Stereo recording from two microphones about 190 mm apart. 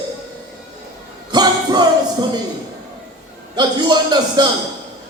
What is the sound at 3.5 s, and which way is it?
Speech, 20° right (ahead or behind).